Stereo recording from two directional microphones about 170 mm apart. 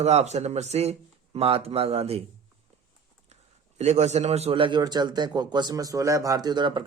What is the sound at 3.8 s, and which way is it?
A man's voice, 40° right (ahead or behind).